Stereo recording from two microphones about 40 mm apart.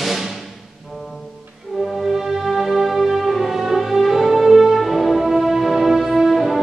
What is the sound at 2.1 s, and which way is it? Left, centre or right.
Music, centre.